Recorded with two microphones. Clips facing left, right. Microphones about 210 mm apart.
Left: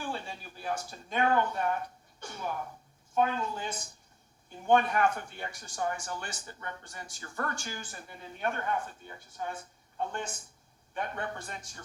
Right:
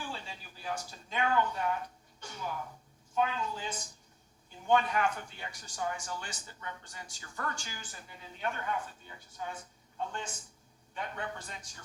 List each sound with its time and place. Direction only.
0.0 s speech: 55° left (ahead or behind)